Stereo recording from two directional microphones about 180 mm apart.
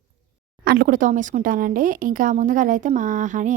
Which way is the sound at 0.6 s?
55° right (ahead or behind).